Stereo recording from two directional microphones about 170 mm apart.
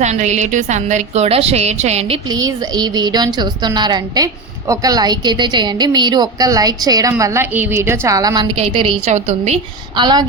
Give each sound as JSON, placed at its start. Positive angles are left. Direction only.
{"t": 0.0, "sound": "a woman's voice", "side_deg": -40}
{"t": 2.3, "sound": "a woman's voice", "side_deg": -25}
{"t": 8.5, "sound": "a woman's voice", "side_deg": -35}
{"t": 10.0, "sound": "a woman's voice", "side_deg": -25}